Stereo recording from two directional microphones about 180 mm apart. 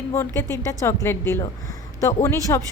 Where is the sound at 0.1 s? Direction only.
15° left (ahead or behind).